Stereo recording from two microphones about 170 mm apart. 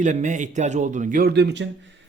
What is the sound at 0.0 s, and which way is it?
A man's voice, 45° right (ahead or behind).